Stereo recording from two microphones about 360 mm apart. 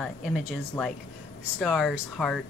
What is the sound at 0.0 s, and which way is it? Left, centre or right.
Speech, centre.